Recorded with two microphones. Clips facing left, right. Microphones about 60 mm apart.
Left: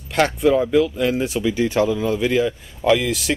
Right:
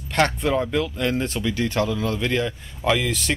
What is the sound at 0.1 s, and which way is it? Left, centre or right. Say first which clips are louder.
Speech: left 4 dB; centre.